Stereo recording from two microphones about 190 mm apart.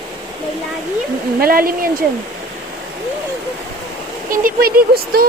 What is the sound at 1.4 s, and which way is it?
Speech, 50° right (ahead or behind).